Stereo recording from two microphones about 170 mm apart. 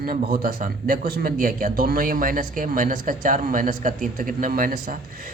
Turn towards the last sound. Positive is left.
turn(degrees=-55)  # may be behind; listen again after turning